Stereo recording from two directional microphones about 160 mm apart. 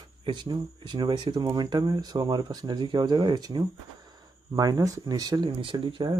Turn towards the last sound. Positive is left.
turn(degrees=-30)  # may be behind; listen again after turning